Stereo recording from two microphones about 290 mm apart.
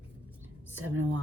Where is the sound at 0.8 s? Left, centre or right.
Right.